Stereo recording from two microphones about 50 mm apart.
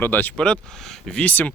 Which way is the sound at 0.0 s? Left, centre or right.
Left.